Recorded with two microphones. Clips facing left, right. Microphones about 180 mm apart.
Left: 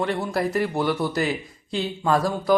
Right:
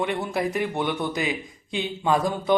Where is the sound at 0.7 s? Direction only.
5° left (ahead or behind).